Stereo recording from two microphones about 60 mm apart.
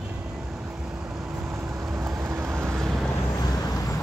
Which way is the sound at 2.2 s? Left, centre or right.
Right.